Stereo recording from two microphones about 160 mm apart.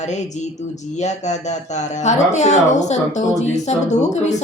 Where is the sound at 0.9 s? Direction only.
45° left (ahead or behind).